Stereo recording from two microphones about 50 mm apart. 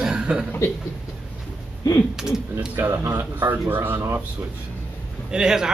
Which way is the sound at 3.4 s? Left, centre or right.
Right.